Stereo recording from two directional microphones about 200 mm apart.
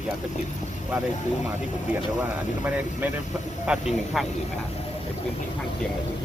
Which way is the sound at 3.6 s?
5° right (ahead or behind).